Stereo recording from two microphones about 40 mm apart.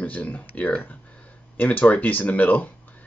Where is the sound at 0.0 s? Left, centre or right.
Left.